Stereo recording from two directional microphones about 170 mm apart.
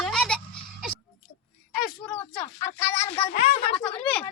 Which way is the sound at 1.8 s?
Centre (ahead or behind).